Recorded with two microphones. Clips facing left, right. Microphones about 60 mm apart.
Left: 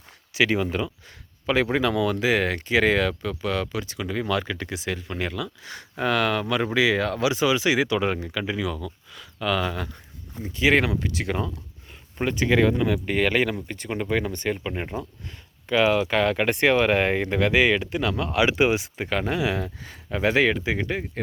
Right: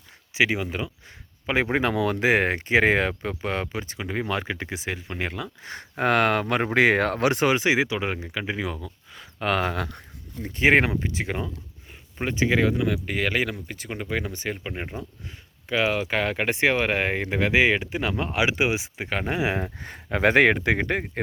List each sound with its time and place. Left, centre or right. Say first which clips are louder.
0.3 s speech: left 1 dB; centre
1.5 s speech: left 1 dB; right
5.3 s speech: left 2 dB; right
7.6 s speech: left 1 dB; right
9.4 s speech: right 1 dB; right
10.4 s speech: right 1 dB; right
11.0 s speech: left 2 dB; right
12.5 s speech: left 2 dB; centre; by 18.4 s right
18.4 s speech: left 4 dB; centre
19.3 s speech: even; right